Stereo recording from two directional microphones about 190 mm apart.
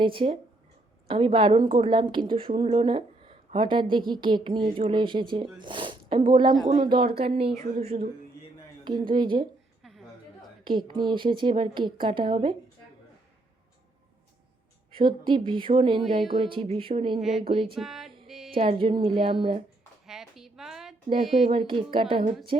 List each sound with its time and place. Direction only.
0.0 s speech: 25° right (ahead or behind)
8.8 s speech: 20° right (ahead or behind)
10.6 s speech: 25° right (ahead or behind)
15.2 s speech: 25° right (ahead or behind)
17.2 s music: centre (ahead or behind)
17.5 s speech: 25° right (ahead or behind)
17.7 s music: centre (ahead or behind)
18.3 s a sound: centre (ahead or behind)
18.5 s speech: 30° right (ahead or behind)
20.1 s a sound: centre (ahead or behind)
21.4 s speech: 30° right (ahead or behind)